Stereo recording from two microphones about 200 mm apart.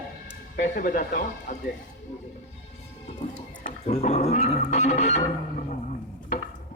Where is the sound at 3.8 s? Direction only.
35° left (ahead or behind).